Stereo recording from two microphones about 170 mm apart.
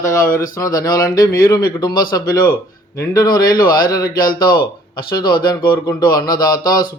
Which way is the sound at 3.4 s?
60° left (ahead or behind).